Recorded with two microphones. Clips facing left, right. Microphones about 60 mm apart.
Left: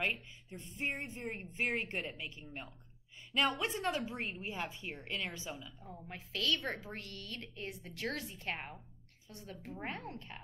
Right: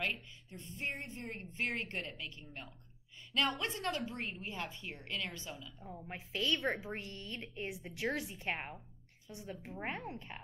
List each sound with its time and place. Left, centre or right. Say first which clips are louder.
0.0 s a woman's voice: left 2 dB; left
5.8 s a woman's voice: right 2 dB; centre
6.0 s a woman's voice: even; centre